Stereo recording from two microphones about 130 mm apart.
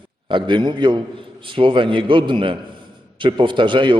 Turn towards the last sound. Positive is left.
turn(degrees=-40)  # may be behind; listen again after turning